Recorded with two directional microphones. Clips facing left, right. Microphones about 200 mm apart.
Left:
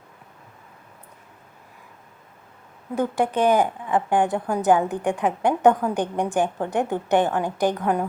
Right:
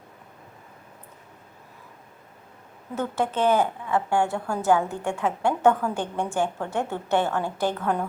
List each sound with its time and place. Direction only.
2.9 s a woman's voice: 15° left (ahead or behind)